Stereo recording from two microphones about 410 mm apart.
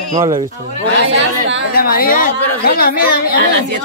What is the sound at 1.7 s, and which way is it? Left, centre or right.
A woman's voice, left.